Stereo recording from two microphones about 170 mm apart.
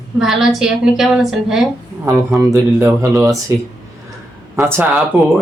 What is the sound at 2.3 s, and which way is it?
Speech, 15° right (ahead or behind).